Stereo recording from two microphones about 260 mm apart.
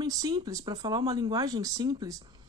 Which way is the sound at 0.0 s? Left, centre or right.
Centre.